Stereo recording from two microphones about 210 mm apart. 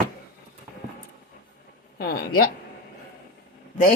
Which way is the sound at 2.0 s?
45° left (ahead or behind).